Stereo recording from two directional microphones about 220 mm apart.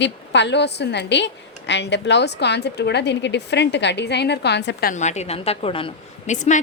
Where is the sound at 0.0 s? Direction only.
50° left (ahead or behind).